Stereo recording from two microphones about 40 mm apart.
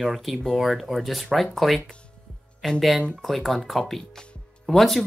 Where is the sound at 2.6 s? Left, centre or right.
Centre.